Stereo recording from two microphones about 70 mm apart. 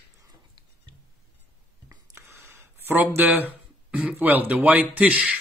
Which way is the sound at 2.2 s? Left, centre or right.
Right.